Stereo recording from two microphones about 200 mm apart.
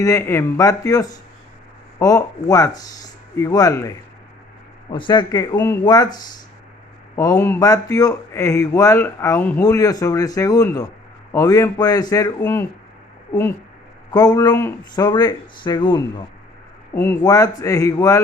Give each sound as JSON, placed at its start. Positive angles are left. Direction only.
{"t": 0.0, "sound": "a man's voice", "side_deg": 15}
{"t": 7.3, "sound": "a man's voice", "side_deg": 10}
{"t": 14.1, "sound": "speech", "side_deg": 20}
{"t": 16.9, "sound": "a man's voice", "side_deg": 10}